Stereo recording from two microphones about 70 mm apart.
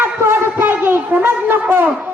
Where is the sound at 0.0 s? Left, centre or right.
Right.